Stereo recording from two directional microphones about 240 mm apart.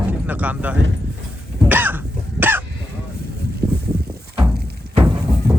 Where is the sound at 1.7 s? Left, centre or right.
Centre.